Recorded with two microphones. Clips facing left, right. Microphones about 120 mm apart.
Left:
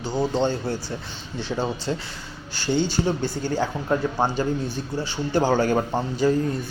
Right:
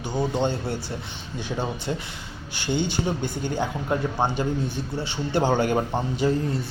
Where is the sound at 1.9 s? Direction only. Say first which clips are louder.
Left 2 dB; 15° right (ahead or behind).